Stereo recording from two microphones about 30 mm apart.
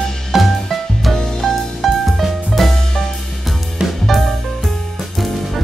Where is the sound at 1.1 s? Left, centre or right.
Left.